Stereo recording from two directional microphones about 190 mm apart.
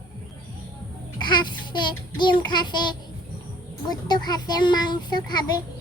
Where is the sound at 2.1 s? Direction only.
25° left (ahead or behind).